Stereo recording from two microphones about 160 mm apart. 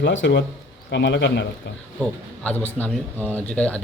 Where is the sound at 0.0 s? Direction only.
90° left.